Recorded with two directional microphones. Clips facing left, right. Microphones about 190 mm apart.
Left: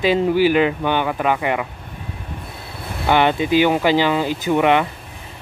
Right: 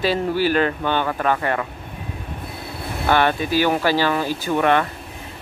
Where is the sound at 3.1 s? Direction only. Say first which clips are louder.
Left 3 dB; 20° left (ahead or behind).